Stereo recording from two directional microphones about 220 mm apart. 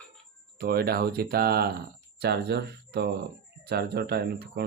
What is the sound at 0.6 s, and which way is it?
Speech, 45° right (ahead or behind).